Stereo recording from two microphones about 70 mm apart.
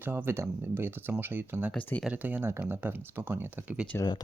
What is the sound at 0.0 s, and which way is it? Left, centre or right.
Speech, right.